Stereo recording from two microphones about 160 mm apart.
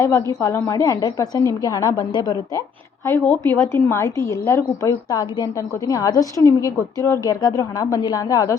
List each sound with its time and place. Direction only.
0.0 s a woman's voice: 20° left (ahead or behind)